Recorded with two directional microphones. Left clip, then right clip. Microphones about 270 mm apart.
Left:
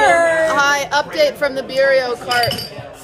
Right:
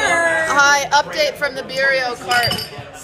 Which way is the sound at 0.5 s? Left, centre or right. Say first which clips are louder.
Right 2 dB; centre.